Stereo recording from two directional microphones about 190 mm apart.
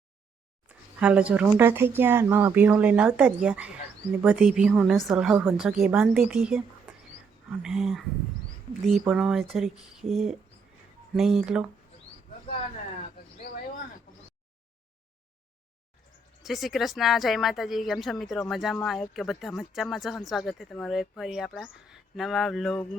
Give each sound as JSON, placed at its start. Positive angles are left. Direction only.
{"t": 0.7, "sound": "speech", "side_deg": -5}
{"t": 7.6, "sound": "speech", "side_deg": 0}
{"t": 13.5, "sound": "a sound", "side_deg": 55}
{"t": 16.4, "sound": "speech", "side_deg": 0}